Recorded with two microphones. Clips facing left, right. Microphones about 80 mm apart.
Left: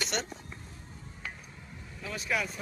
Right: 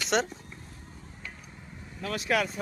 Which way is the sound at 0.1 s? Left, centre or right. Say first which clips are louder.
Right 11 dB; right.